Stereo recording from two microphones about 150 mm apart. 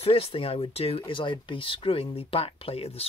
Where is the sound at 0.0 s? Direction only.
40° left (ahead or behind).